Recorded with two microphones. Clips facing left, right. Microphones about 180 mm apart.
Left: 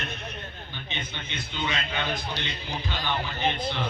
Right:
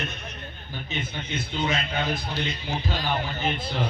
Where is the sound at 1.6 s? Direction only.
35° right (ahead or behind).